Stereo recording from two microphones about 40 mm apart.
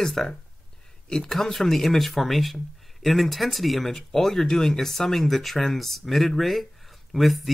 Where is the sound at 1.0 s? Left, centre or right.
Left.